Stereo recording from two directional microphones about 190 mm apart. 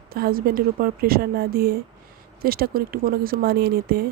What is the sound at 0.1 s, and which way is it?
A woman's voice, 55° right (ahead or behind).